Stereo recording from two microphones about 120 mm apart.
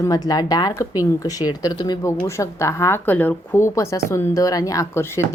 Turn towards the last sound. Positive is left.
turn(degrees=25)  # may be behind; listen again after turning